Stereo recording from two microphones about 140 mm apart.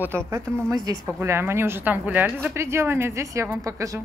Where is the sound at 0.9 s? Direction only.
25° right (ahead or behind).